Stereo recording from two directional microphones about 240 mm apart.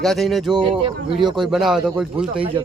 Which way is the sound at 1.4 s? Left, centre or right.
Centre.